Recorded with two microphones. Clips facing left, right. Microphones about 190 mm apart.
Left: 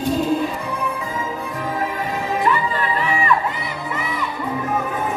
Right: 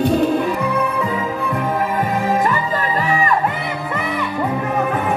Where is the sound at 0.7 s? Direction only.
65° right (ahead or behind).